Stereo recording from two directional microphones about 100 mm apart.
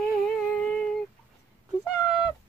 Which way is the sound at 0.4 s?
10° left (ahead or behind).